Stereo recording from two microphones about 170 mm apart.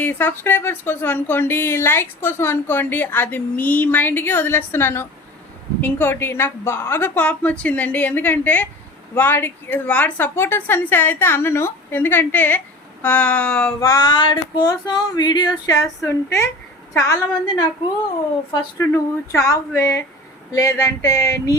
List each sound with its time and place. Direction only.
0.0 s a woman's voice: 10° left (ahead or behind)
13.7 s female singing: 20° left (ahead or behind)
19.3 s a woman's voice: 15° left (ahead or behind)
20.5 s female singing: 20° left (ahead or behind)